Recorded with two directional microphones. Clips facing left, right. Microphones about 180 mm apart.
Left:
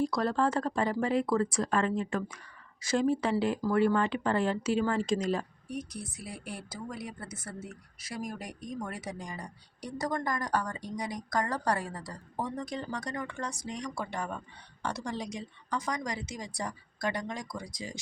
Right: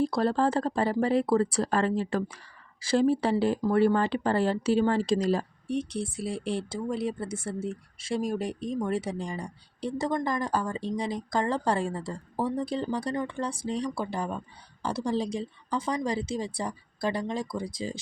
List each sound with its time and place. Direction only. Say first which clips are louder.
0.0 s speech: right 3 dB; 30° right (ahead or behind)